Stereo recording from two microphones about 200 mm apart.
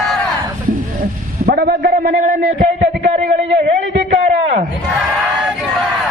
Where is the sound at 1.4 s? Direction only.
50° right (ahead or behind).